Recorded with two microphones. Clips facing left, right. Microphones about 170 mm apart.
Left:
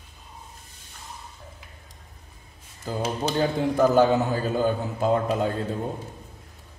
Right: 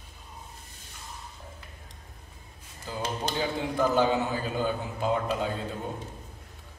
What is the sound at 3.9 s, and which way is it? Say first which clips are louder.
A man's voice: left 5 dB; 45° left (ahead or behind).